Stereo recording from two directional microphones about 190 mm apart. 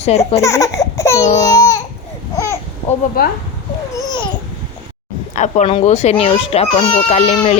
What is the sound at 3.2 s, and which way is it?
Speech, 50° left (ahead or behind).